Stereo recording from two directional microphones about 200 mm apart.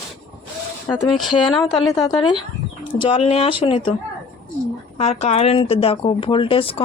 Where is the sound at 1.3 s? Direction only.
25° left (ahead or behind).